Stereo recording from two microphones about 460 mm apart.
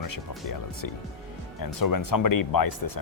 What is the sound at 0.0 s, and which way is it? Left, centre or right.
Speech, left.